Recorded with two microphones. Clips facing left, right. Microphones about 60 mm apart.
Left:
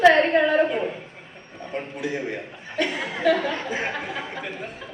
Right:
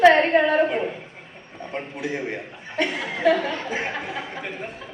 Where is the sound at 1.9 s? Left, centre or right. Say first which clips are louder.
Even; right.